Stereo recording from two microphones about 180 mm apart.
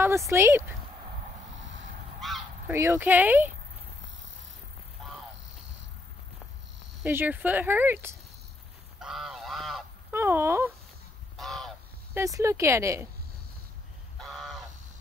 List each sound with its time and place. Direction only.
0.0 s speech: 15° right (ahead or behind)
2.1 s honk: centre (ahead or behind)
2.7 s speech: 15° right (ahead or behind)
5.0 s insect: centre (ahead or behind)
7.0 s speech: 10° right (ahead or behind)
9.0 s goose: centre (ahead or behind)
10.1 s speech: 15° right (ahead or behind)
11.3 s goose: centre (ahead or behind)
12.1 s speech: 15° right (ahead or behind)
14.1 s crow: centre (ahead or behind)